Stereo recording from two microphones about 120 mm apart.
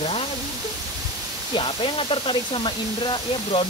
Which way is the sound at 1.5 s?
45° left (ahead or behind).